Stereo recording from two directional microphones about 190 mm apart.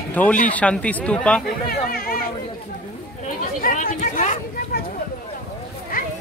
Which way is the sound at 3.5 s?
45° left (ahead or behind).